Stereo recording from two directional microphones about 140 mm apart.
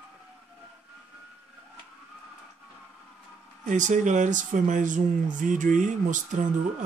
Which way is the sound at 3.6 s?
65° right (ahead or behind).